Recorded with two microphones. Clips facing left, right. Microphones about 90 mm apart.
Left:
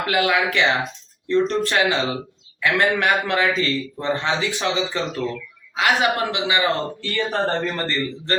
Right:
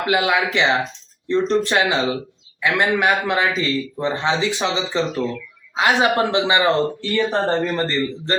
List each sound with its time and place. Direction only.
0.0 s a man's voice: 20° right (ahead or behind)
7.0 s speech: 20° right (ahead or behind)